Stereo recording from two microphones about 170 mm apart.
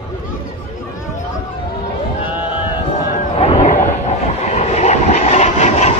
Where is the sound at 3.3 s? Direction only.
35° left (ahead or behind).